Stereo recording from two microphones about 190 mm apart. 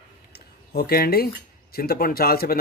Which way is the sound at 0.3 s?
55° left (ahead or behind).